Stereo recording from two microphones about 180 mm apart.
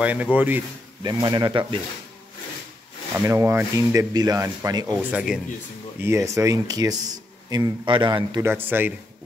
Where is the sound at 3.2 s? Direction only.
15° right (ahead or behind).